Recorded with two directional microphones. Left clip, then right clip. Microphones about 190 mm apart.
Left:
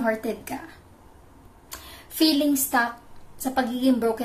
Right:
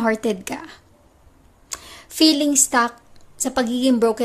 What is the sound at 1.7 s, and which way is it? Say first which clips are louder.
A woman's voice: right 6 dB; 45° right (ahead or behind).